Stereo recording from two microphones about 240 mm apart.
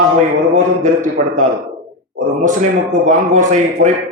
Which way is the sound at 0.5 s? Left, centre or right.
Right.